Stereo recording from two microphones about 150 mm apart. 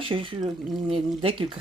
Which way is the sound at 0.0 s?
35° right (ahead or behind).